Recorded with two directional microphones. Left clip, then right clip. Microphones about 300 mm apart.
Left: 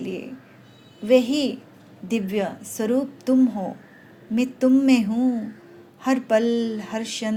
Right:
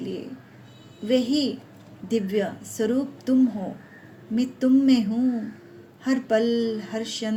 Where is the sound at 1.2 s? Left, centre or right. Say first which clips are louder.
Left 1 dB; left.